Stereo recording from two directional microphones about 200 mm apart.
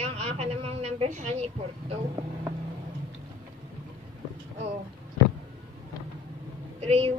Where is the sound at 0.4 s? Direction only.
30° right (ahead or behind).